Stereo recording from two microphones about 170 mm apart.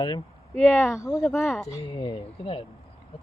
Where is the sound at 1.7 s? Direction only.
25° left (ahead or behind).